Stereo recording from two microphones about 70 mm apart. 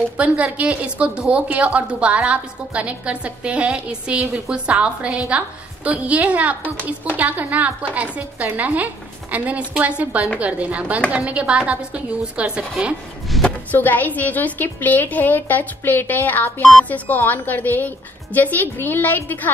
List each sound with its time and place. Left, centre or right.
0.2 s a woman's voice: centre
13.4 s a sound: centre
13.7 s a woman's voice: left